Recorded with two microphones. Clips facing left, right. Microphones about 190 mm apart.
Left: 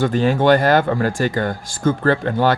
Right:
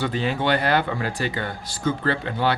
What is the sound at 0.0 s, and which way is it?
Speech, 45° left (ahead or behind).